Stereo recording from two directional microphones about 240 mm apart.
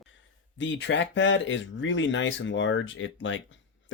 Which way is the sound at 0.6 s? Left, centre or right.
Left.